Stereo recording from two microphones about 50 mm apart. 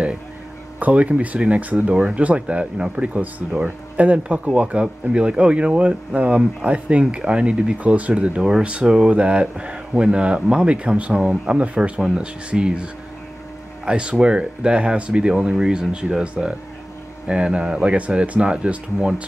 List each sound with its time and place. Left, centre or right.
0.7 s speech: right
8.4 s speech: centre
13.8 s speech: centre